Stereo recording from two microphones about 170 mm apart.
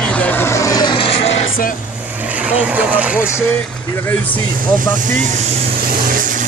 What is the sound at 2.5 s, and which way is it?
Speech, 10° right (ahead or behind).